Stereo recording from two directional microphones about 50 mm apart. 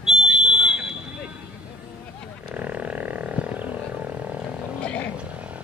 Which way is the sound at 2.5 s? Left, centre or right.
Right.